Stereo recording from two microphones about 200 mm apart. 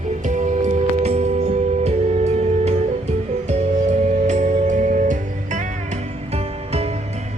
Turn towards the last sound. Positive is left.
turn(degrees=-30)  # may be behind; listen again after turning